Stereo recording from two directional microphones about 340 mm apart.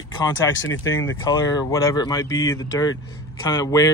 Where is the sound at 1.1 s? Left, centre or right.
Centre.